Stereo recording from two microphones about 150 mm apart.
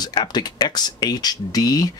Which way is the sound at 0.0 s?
30° left (ahead or behind).